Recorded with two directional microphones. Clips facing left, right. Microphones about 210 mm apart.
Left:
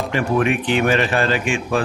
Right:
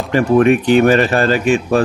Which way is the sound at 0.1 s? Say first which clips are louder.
Right 9 dB; 40° right (ahead or behind).